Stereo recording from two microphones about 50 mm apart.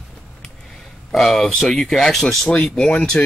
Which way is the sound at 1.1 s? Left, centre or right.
Centre.